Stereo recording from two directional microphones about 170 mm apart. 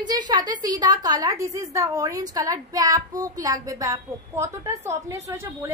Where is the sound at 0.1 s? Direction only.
20° right (ahead or behind).